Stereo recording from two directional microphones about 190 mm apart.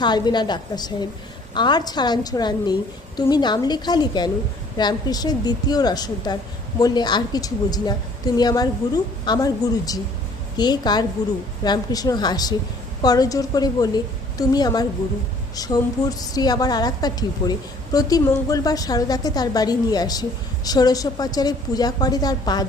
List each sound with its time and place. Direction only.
0.0 s a woman's voice: 20° left (ahead or behind)